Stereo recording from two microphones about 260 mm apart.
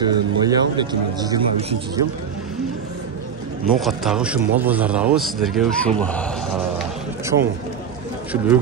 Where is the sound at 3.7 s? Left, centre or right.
Centre.